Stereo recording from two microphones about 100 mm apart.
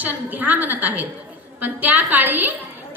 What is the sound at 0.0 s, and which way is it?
A woman's voice, 15° right (ahead or behind).